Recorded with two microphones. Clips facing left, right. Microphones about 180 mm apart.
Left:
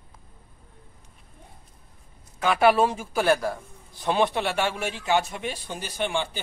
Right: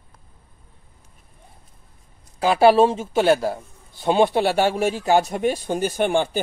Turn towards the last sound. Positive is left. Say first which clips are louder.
# right 8 dB
turn(degrees=-45)  # may be behind; listen again after turning